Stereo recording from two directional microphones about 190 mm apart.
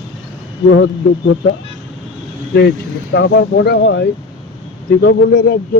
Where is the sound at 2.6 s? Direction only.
60° left (ahead or behind).